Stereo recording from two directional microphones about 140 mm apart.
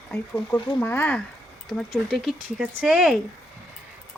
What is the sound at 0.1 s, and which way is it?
Speech, 15° left (ahead or behind).